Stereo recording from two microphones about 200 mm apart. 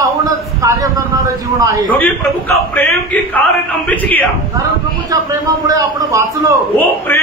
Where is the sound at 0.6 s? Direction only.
15° right (ahead or behind).